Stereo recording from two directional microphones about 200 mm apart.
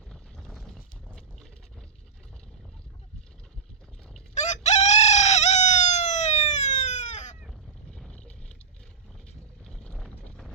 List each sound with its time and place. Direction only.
0.1 s a sound: centre (ahead or behind)
4.4 s chicken: 35° left (ahead or behind)
7.9 s boat: 5° left (ahead or behind)
9.6 s vehicle: 5° left (ahead or behind)